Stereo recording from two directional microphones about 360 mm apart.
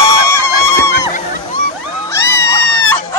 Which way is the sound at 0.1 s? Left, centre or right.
Right.